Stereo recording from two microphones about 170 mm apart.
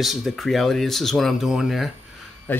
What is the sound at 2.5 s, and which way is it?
Speech, 10° left (ahead or behind).